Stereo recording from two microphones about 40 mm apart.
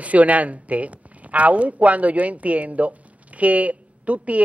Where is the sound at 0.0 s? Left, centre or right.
Right.